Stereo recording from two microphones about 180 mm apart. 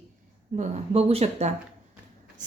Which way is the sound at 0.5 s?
35° right (ahead or behind).